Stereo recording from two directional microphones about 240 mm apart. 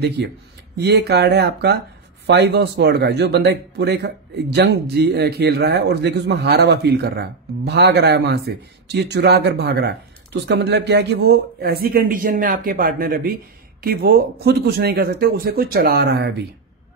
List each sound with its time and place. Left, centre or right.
0.7 s speech: right